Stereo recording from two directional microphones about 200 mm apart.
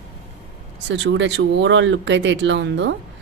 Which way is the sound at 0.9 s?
65° right (ahead or behind).